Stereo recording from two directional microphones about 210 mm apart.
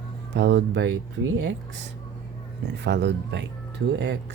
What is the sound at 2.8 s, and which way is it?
Speech, 55° right (ahead or behind).